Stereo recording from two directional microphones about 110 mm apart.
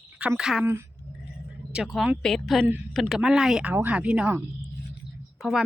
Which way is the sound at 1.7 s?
5° right (ahead or behind).